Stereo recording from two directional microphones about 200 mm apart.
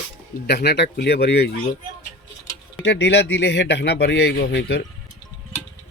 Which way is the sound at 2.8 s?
60° left (ahead or behind).